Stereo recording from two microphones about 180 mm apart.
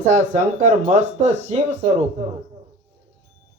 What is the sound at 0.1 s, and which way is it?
Speech, 40° right (ahead or behind).